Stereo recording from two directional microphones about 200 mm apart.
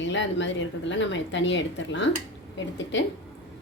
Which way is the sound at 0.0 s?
65° left (ahead or behind).